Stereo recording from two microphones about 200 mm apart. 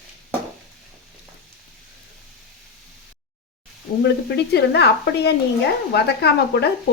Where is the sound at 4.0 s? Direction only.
55° left (ahead or behind).